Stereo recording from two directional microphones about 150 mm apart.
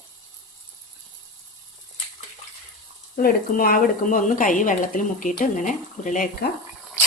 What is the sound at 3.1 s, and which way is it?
Speech, 70° left (ahead or behind).